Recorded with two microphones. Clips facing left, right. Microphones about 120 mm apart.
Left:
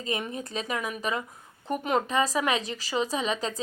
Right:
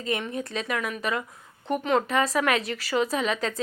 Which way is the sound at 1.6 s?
5° left (ahead or behind).